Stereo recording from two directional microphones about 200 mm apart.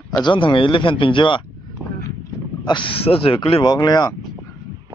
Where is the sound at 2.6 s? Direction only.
25° left (ahead or behind).